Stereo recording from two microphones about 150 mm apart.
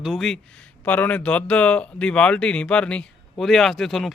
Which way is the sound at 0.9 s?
10° left (ahead or behind).